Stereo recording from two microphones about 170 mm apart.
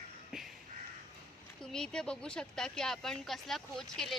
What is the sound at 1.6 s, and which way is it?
Speech, 5° left (ahead or behind).